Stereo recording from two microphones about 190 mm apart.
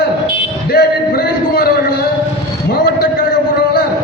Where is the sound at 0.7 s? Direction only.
55° left (ahead or behind).